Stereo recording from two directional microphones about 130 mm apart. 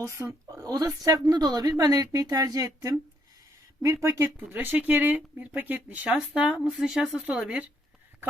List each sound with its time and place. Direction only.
0.0 s a woman's voice: 20° right (ahead or behind)